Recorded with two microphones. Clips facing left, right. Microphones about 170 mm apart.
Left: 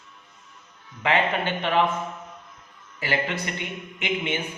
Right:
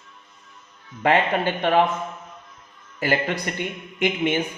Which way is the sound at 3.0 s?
45° right (ahead or behind).